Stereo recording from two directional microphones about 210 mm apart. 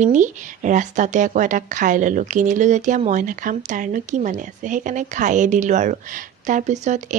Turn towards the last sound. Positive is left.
turn(degrees=-35)  # may be behind; listen again after turning